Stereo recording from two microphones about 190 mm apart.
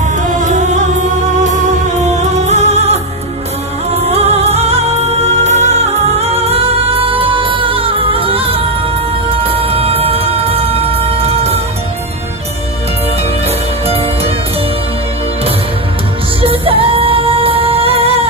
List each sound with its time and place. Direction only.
0.0 s music: 40° right (ahead or behind)
4.1 s music: 35° right (ahead or behind)
13.8 s music: 30° right (ahead or behind)
16.3 s music: 30° right (ahead or behind)